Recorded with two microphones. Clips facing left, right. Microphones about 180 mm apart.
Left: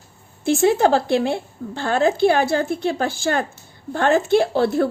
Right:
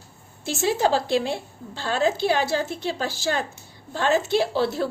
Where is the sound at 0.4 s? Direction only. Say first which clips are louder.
Left 6 dB; 55° left (ahead or behind).